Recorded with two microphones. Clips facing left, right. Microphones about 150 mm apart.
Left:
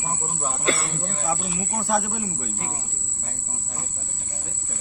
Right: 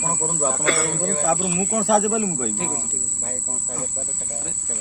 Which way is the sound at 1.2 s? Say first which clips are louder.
Right 5 dB; 90° right.